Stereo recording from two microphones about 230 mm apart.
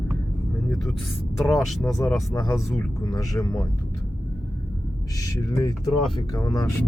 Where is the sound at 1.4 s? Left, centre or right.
Centre.